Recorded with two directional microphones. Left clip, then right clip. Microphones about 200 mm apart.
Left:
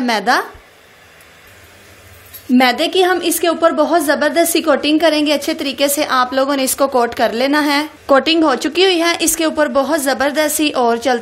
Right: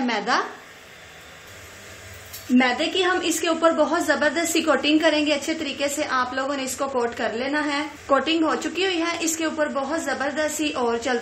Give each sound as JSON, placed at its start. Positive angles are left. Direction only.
{"t": 0.0, "sound": "speech", "side_deg": 40}
{"t": 2.5, "sound": "a woman's voice", "side_deg": 50}